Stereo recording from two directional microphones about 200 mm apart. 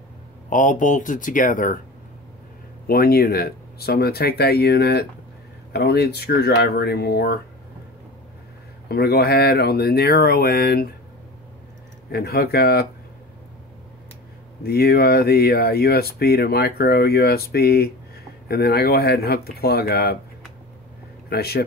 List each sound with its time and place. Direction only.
0.5 s speech: 40° left (ahead or behind)
2.9 s speech: 50° left (ahead or behind)
8.8 s speech: 50° left (ahead or behind)
12.1 s speech: 50° left (ahead or behind)
14.6 s speech: 50° left (ahead or behind)
21.3 s speech: 50° left (ahead or behind)